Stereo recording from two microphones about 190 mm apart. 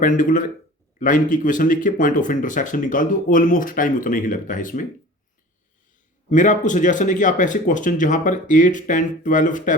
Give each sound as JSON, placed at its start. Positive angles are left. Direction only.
{"t": 0.0, "sound": "speech", "side_deg": 45}
{"t": 6.3, "sound": "speech", "side_deg": 40}